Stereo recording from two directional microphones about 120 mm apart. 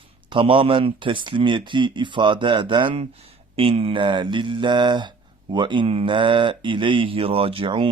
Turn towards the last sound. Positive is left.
turn(degrees=-45)  # may be behind; listen again after turning